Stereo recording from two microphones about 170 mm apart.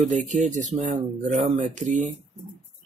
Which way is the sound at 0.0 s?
50° right (ahead or behind).